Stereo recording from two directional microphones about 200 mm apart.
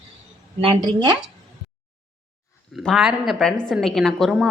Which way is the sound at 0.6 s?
25° right (ahead or behind).